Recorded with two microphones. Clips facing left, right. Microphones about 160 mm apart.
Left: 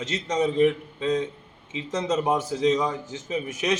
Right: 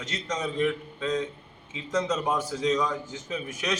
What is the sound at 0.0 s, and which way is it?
A man's voice, 25° left (ahead or behind).